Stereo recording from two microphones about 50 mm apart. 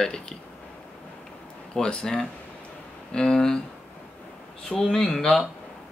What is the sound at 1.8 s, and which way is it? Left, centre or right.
Speech, centre.